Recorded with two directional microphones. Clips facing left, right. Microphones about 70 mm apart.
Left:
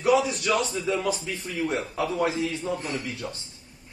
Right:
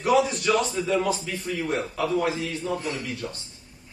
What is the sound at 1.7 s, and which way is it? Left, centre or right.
A man's voice, left.